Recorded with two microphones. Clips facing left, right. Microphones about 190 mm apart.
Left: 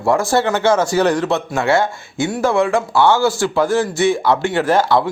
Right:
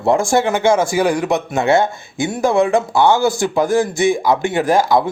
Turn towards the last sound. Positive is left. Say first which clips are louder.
# right 1 dB
turn(degrees=-10)  # may be behind; listen again after turning